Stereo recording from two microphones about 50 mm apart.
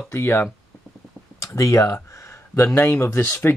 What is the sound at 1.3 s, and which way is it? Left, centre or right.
Speech, left.